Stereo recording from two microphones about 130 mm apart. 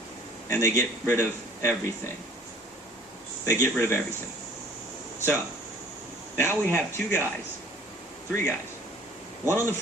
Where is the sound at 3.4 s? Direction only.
20° left (ahead or behind).